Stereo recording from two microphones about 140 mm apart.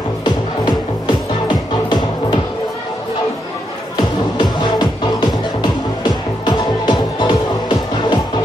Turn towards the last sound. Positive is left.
turn(degrees=30)  # may be behind; listen again after turning